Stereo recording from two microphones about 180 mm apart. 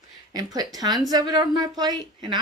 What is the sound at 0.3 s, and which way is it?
Speech, 20° right (ahead or behind).